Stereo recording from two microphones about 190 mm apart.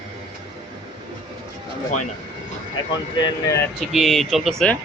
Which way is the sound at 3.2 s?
25° left (ahead or behind).